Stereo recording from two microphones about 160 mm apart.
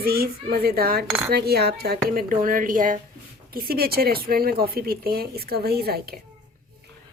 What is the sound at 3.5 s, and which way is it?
Speech, 70° right (ahead or behind).